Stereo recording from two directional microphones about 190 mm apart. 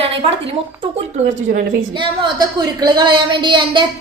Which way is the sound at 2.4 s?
20° right (ahead or behind).